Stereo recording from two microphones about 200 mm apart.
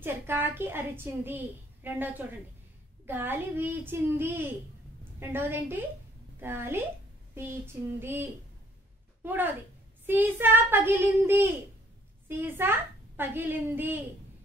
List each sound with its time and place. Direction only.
0.0 s a woman's voice: 10° right (ahead or behind)